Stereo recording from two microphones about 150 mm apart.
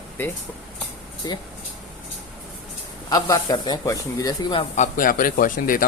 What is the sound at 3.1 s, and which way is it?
Speech, 25° left (ahead or behind).